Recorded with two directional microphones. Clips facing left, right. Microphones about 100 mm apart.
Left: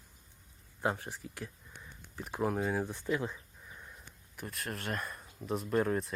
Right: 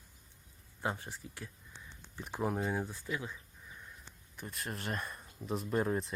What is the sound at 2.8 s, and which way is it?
Speech, 20° left (ahead or behind).